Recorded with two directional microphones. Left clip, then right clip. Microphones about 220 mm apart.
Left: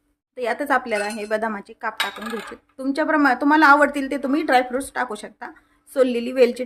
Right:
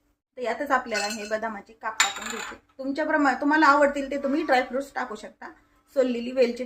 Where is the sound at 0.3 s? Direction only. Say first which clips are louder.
Left 4 dB; 40° left (ahead or behind).